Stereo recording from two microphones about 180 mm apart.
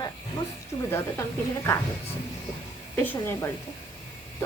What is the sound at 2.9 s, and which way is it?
Speech, 10° left (ahead or behind).